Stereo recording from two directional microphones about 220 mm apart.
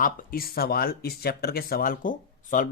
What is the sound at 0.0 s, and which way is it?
Speech, 40° left (ahead or behind).